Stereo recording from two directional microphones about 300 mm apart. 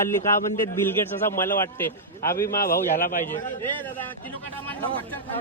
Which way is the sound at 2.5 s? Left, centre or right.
Left.